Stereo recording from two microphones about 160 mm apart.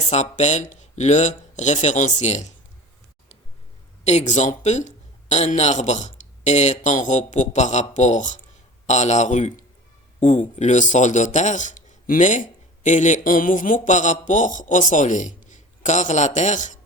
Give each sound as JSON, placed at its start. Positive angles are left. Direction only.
{"t": 0.1, "sound": "a man's voice", "side_deg": 45}
{"t": 4.0, "sound": "a man's voice", "side_deg": 45}